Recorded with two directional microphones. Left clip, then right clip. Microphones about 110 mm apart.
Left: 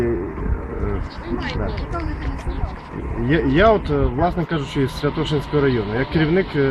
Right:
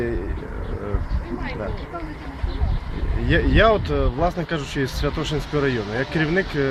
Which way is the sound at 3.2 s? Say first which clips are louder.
Left 2 dB; 35° right (ahead or behind).